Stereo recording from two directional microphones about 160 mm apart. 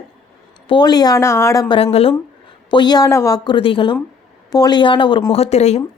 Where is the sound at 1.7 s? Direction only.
35° left (ahead or behind).